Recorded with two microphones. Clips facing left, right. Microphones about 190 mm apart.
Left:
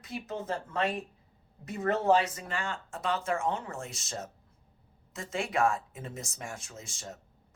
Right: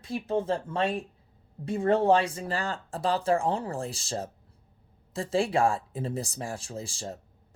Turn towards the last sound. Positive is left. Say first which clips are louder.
# right 8 dB
turn(degrees=-30)  # may be behind; listen again after turning